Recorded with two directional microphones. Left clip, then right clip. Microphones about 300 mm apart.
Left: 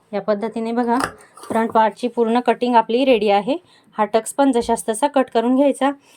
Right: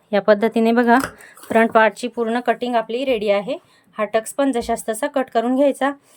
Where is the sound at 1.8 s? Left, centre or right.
Centre.